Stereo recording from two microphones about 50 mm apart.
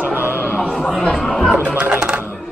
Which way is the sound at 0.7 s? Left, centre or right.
Centre.